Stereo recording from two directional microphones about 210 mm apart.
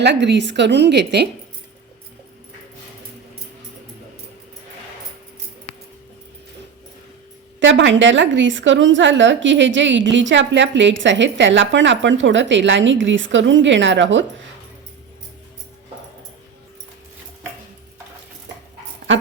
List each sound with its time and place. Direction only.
0.0 s a woman's voice: 55° right (ahead or behind)
7.6 s a woman's voice: 60° right (ahead or behind)